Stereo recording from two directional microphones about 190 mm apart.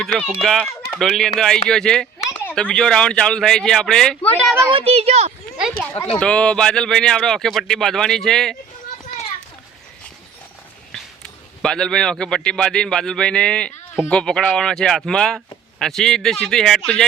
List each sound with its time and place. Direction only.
0.0 s speech: centre (ahead or behind)
4.7 s a child's voice: 30° right (ahead or behind)
6.1 s speech: 5° left (ahead or behind)
10.9 s a man's voice: 5° left (ahead or behind)